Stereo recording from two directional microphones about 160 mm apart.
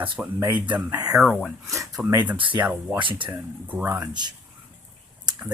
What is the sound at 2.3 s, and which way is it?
Speech, 30° right (ahead or behind).